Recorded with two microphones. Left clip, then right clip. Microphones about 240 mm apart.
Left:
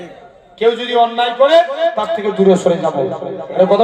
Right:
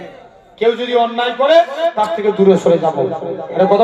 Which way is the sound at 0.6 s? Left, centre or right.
Left.